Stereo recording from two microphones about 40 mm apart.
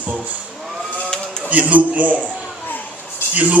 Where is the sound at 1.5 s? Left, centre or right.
Right.